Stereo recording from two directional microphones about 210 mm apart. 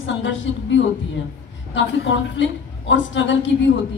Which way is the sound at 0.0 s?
60° left (ahead or behind).